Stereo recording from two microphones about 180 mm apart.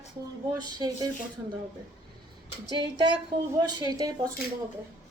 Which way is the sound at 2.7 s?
25° right (ahead or behind).